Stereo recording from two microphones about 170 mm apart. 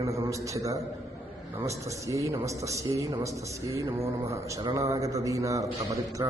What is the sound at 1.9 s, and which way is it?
A man's voice, 20° right (ahead or behind).